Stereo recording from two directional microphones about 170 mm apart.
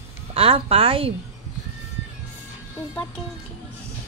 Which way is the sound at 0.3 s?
35° right (ahead or behind).